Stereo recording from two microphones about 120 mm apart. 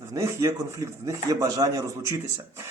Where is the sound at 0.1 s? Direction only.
25° right (ahead or behind).